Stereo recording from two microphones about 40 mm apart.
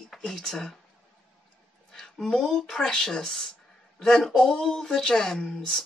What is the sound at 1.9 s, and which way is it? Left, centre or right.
Speech, centre.